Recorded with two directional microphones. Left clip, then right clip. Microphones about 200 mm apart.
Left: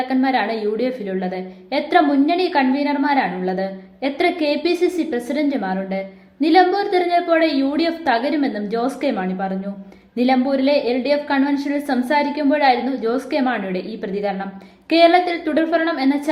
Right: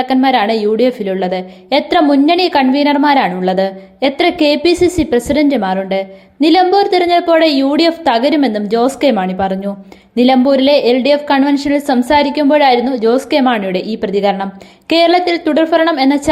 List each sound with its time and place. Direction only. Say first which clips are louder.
0.0 s a woman's voice: right 7 dB; 35° right (ahead or behind)